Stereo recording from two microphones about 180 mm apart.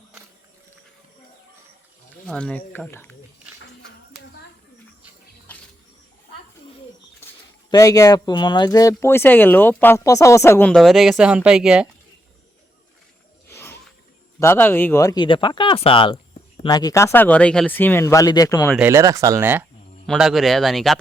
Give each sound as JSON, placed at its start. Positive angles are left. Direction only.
{"t": 2.2, "sound": "speech", "side_deg": 5}
{"t": 5.5, "sound": "bird", "side_deg": 10}
{"t": 7.7, "sound": "speech", "side_deg": 20}
{"t": 13.5, "sound": "snake", "side_deg": 10}
{"t": 14.3, "sound": "speech", "side_deg": 15}
{"t": 18.8, "sound": "speech", "side_deg": -15}